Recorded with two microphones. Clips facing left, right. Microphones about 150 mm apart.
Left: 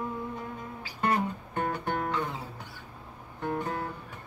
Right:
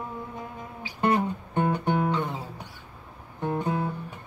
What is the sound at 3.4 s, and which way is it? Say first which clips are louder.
Music: right 4 dB; 20° right (ahead or behind).